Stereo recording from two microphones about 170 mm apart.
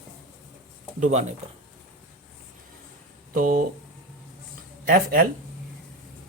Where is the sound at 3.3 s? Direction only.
50° right (ahead or behind).